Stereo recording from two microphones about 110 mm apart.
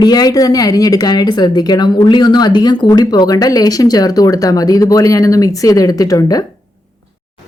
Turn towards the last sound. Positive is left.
turn(degrees=35)  # may be behind; listen again after turning